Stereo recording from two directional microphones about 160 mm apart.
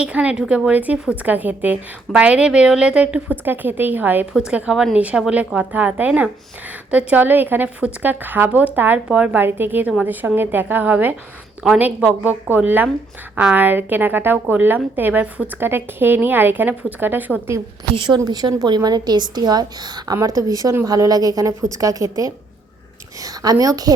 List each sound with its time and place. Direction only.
0.0 s a woman's voice: 10° right (ahead or behind)
18.1 s a woman's voice: 25° right (ahead or behind)